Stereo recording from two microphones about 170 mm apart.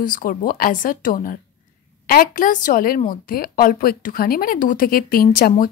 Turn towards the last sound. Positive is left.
turn(degrees=55)  # may be behind; listen again after turning